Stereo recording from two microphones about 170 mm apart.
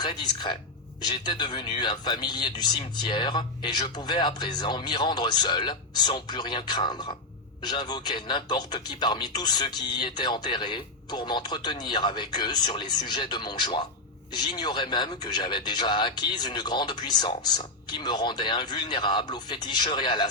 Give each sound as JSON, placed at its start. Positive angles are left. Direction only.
{"t": 0.0, "sound": "speech", "side_deg": 25}